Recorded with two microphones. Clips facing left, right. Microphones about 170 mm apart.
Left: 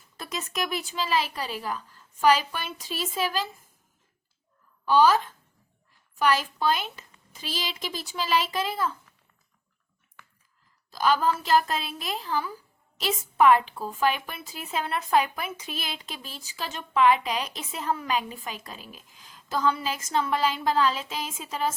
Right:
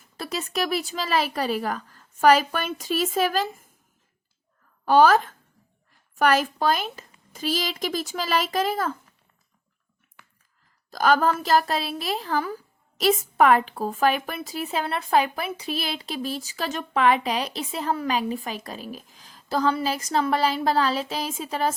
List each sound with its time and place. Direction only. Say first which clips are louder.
0.2 s speech: right 4 dB; 35° right (ahead or behind)
4.9 s speech: right 3 dB; 50° right (ahead or behind)
10.9 s a woman's voice: right 3 dB; 45° right (ahead or behind)